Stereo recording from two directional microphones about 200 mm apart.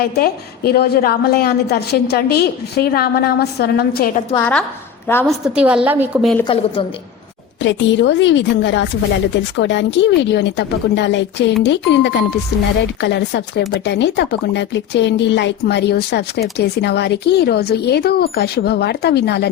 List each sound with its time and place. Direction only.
0.0 s a woman's voice: 50° left (ahead or behind)
4.4 s a woman's voice: 5° left (ahead or behind)
5.5 s a woman's voice: 5° right (ahead or behind)
6.4 s a woman's voice: 25° left (ahead or behind)
7.6 s speech: 65° left (ahead or behind)